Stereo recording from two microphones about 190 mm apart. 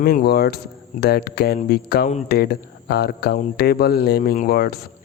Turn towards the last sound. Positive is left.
turn(degrees=55)  # may be behind; listen again after turning